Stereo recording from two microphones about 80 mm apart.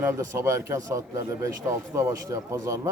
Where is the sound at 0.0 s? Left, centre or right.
Right.